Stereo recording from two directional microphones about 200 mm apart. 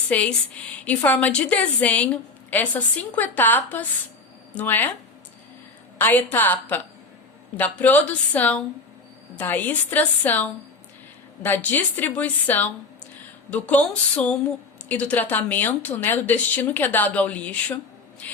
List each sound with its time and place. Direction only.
0.1 s speech: 5° left (ahead or behind)
6.0 s speech: 10° left (ahead or behind)